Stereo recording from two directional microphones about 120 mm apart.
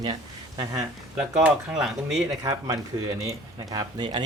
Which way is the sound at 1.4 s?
5° right (ahead or behind).